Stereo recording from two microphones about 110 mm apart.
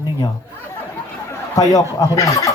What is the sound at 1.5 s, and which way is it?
Speech, 30° left (ahead or behind).